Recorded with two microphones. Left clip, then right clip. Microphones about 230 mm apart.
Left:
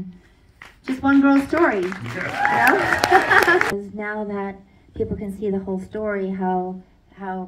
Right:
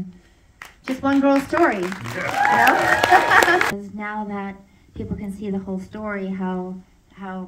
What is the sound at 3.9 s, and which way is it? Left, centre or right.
A woman's voice, right.